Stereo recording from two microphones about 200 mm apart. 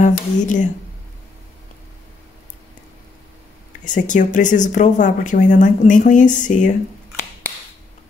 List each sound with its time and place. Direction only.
0.0 s speech: 40° left (ahead or behind)
3.8 s speech: 40° left (ahead or behind)